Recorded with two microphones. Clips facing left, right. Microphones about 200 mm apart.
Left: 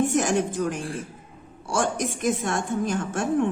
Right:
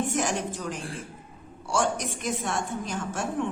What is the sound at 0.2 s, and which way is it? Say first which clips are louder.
A woman's voice: left 6 dB; 50° left (ahead or behind).